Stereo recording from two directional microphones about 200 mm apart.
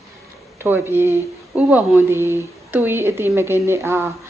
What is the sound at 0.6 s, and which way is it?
Speech, 10° right (ahead or behind).